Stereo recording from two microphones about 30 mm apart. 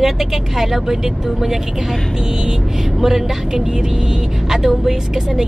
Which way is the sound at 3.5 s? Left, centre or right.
Centre.